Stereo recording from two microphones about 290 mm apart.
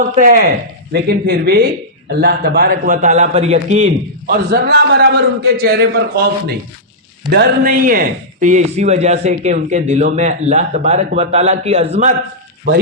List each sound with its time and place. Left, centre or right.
0.0 s a man's voice: right
7.3 s a man's voice: right